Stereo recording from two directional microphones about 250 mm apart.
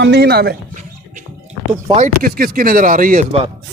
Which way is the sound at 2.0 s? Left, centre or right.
Right.